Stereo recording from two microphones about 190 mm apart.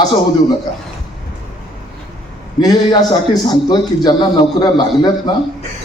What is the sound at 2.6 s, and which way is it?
A man's voice, 20° left (ahead or behind).